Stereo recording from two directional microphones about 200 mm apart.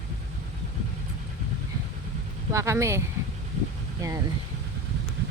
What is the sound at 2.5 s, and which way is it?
Speech, 15° right (ahead or behind).